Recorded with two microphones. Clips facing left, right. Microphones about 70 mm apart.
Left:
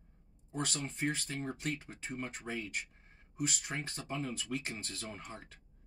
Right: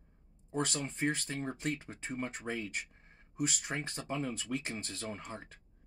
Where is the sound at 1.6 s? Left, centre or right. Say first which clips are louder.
Right 2 dB; centre.